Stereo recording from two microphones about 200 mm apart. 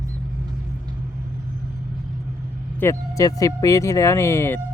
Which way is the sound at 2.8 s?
15° left (ahead or behind).